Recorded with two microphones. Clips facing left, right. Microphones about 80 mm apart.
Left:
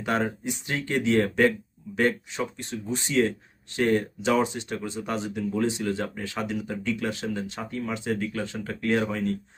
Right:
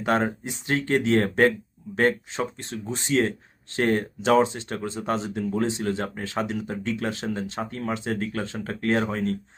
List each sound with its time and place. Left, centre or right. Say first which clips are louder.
0.0 s speech: right 3 dB; right
7.7 s speech: left 3 dB; right